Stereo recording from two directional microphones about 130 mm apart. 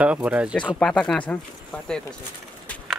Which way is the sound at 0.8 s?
5° left (ahead or behind).